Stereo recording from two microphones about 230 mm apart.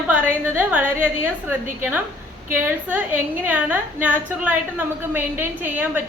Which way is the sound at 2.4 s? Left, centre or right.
Centre.